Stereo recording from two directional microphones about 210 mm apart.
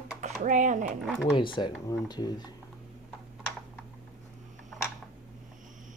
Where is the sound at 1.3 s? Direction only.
25° left (ahead or behind).